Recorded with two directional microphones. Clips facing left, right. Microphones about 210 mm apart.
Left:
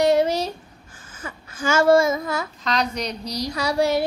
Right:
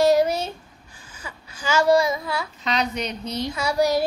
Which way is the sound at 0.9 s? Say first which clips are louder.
Left 3 dB; 50° left (ahead or behind).